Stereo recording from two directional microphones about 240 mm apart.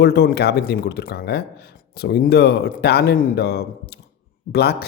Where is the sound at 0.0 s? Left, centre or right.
Left.